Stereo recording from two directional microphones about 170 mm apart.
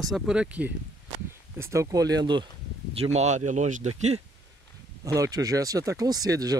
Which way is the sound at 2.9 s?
40° right (ahead or behind).